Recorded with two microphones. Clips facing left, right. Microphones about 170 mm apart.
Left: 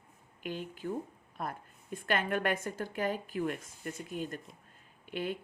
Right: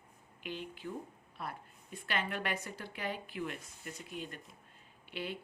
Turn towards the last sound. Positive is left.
turn(degrees=45)  # may be behind; listen again after turning